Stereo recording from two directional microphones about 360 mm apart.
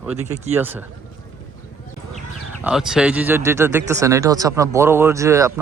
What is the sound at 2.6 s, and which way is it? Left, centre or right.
Speech, centre.